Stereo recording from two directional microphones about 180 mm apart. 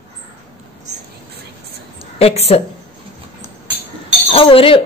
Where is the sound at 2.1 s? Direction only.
35° left (ahead or behind).